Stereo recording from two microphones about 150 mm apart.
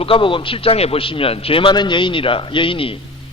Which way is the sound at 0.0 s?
35° left (ahead or behind).